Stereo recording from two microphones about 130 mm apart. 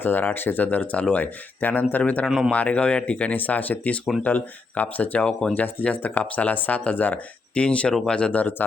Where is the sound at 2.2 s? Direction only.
5° right (ahead or behind).